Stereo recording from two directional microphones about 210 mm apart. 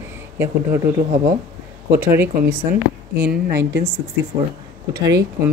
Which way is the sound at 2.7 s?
50° right (ahead or behind).